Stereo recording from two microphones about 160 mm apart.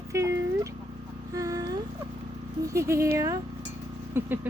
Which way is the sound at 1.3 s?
20° right (ahead or behind).